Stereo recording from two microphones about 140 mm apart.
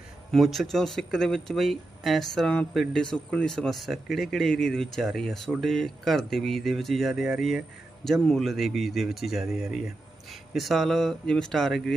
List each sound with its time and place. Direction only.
0.3 s speech: centre (ahead or behind)